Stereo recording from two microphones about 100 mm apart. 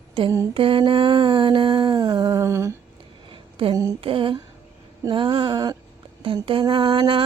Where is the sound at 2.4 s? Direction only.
30° right (ahead or behind).